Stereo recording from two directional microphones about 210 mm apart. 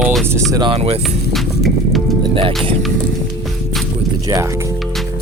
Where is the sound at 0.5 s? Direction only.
25° right (ahead or behind).